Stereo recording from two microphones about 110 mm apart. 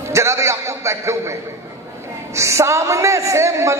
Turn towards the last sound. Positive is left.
turn(degrees=-25)  # may be behind; listen again after turning